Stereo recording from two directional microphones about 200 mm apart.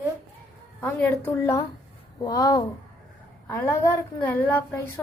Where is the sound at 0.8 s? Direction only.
5° left (ahead or behind).